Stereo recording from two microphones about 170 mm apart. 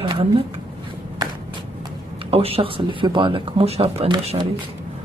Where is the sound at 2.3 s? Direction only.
35° right (ahead or behind).